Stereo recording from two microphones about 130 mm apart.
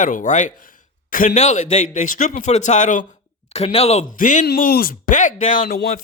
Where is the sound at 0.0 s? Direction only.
80° left.